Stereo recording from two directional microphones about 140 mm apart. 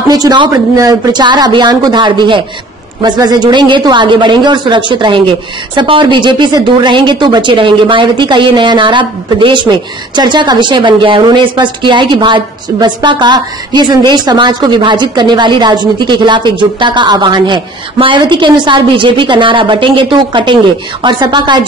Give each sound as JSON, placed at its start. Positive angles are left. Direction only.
{"t": 0.1, "sound": "a woman's voice", "side_deg": -30}